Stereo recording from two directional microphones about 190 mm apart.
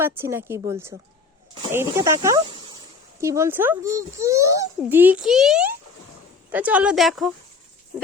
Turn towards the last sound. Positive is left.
turn(degrees=0)  # may be behind; listen again after turning